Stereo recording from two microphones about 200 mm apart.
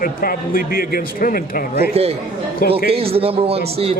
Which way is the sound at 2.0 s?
30° right (ahead or behind).